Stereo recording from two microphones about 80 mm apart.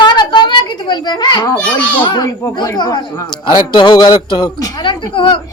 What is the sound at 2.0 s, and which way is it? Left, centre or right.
Speech, left.